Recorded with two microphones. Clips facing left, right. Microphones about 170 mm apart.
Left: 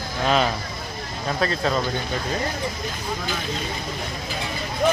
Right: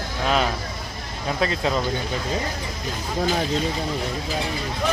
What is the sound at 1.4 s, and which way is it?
Speech, 20° right (ahead or behind).